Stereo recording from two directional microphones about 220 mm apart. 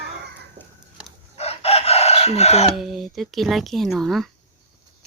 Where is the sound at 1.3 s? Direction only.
30° left (ahead or behind).